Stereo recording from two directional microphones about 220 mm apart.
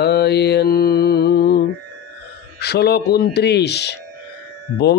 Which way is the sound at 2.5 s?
50° left (ahead or behind).